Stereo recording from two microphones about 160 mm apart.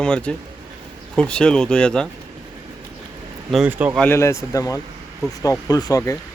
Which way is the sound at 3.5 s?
5° right (ahead or behind).